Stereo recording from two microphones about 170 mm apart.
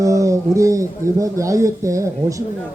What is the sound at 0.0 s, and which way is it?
Speech, 20° right (ahead or behind).